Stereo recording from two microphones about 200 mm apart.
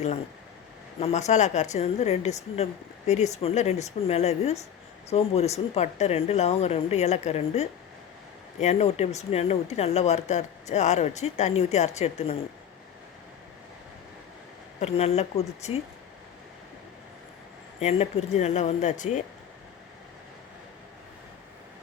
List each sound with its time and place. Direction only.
0.9 s speech: 30° left (ahead or behind)
14.8 s speech: 30° left (ahead or behind)
17.7 s speech: 30° left (ahead or behind)